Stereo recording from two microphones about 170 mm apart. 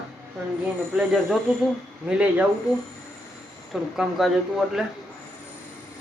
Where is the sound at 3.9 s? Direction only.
Centre (ahead or behind).